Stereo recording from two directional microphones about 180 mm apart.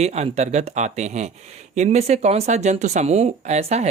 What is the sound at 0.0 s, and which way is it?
Speech, 35° right (ahead or behind).